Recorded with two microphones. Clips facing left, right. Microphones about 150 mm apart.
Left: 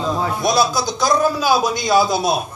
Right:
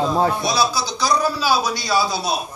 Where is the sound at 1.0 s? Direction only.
50° left (ahead or behind).